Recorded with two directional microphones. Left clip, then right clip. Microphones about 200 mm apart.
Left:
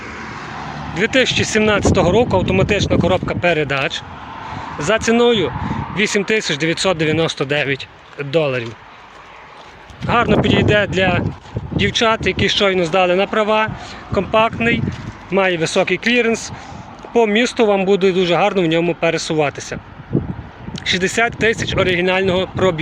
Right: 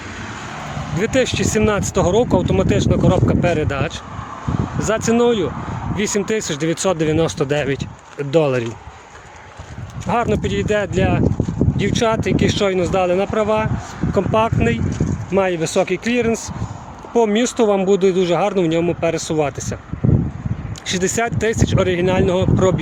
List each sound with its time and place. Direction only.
0.9 s speech: 5° right (ahead or behind); by 8.6 s 30° right (ahead or behind)
10.1 s speech: 5° right (ahead or behind)
14.1 s speech: 15° right (ahead or behind)
20.8 s speech: 10° right (ahead or behind)